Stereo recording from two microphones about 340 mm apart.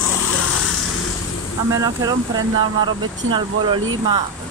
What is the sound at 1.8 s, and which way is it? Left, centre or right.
Speech, centre.